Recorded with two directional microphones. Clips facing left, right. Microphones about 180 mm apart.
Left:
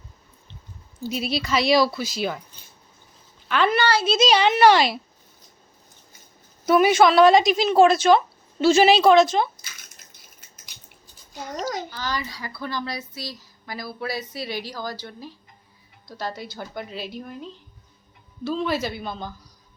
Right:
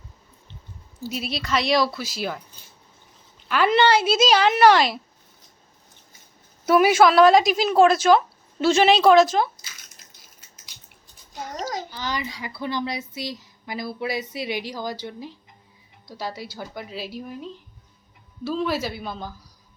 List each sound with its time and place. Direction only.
1.0 s a woman's voice: centre (ahead or behind)
3.7 s a woman's voice: 20° right (ahead or behind)
4.0 s a woman's voice: 5° right (ahead or behind)
6.7 s a woman's voice: 5° right (ahead or behind)
11.9 s a woman's voice: 20° right (ahead or behind)
18.4 s a woman's voice: 5° right (ahead or behind)